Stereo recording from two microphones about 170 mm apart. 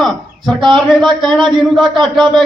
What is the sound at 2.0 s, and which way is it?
Speech, 5° left (ahead or behind).